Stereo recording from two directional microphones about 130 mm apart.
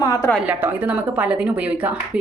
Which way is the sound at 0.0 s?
25° left (ahead or behind).